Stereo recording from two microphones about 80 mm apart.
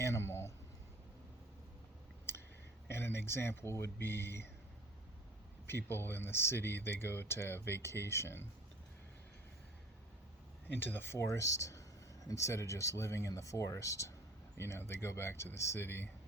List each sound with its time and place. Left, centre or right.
0.0 s a sound: left
2.9 s speech: left
5.6 s speech: left
10.8 s speech: left